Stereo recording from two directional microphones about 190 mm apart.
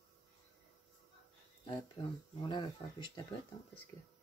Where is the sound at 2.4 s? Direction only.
25° left (ahead or behind).